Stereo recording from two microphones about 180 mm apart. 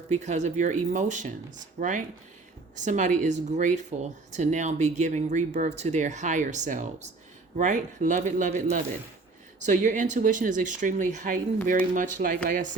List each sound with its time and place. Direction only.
0.1 s speech: 40° right (ahead or behind)
9.6 s speech: 45° right (ahead or behind)